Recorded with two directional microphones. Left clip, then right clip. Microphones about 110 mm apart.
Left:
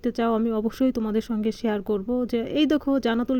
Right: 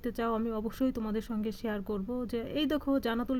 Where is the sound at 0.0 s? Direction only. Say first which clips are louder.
Left 8 dB; 35° left (ahead or behind).